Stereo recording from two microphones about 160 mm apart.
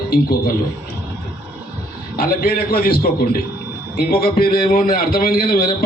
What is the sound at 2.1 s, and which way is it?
A man's voice, 65° left (ahead or behind).